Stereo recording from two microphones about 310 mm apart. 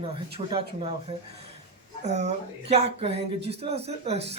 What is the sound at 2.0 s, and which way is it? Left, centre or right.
Speech, right.